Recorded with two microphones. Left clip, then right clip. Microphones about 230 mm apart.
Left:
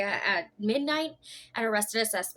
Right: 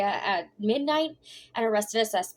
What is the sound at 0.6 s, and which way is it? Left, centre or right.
A woman's voice, centre.